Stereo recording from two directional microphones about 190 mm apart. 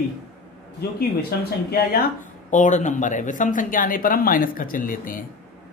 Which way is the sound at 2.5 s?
40° left (ahead or behind).